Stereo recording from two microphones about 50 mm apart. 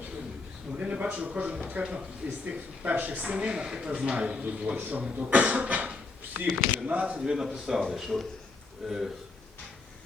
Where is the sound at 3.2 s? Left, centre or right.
Centre.